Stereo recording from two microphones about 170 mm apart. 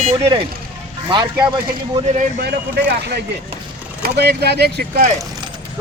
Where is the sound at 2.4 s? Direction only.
70° right (ahead or behind).